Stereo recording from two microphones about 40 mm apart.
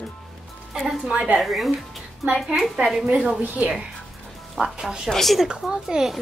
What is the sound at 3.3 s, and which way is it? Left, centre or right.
Speech, right.